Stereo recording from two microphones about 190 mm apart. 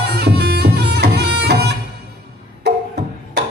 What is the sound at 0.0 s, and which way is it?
Music, 60° right (ahead or behind).